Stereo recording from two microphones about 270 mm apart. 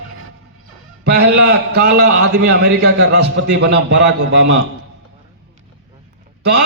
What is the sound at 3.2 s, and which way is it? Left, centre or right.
A man's voice, right.